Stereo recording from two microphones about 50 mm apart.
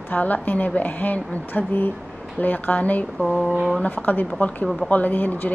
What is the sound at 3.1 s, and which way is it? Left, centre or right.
Speech, centre.